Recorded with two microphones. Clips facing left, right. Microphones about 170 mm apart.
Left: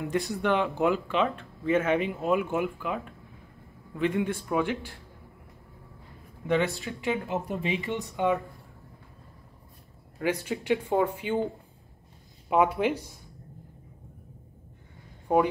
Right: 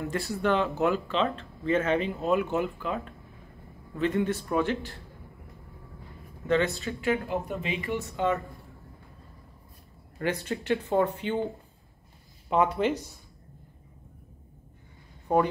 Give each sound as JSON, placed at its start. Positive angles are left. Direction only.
{"t": 0.0, "sound": "speech", "side_deg": 15}
{"t": 6.4, "sound": "speech", "side_deg": 10}
{"t": 10.1, "sound": "speech", "side_deg": 10}
{"t": 12.4, "sound": "speech", "side_deg": 10}
{"t": 15.3, "sound": "speech", "side_deg": 10}